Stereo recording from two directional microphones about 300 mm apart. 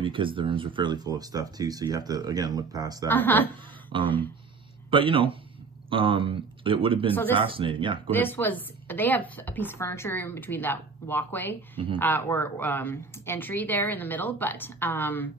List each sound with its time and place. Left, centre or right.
0.0 s speech: centre
3.1 s a woman's voice: centre
3.9 s a man's voice: centre
7.1 s a woman's voice: centre
7.3 s speech: centre
8.1 s a woman's voice: centre